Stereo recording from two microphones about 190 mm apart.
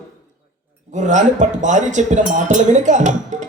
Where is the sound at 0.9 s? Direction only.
40° right (ahead or behind).